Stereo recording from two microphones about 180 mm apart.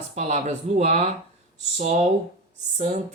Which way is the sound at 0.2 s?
40° right (ahead or behind).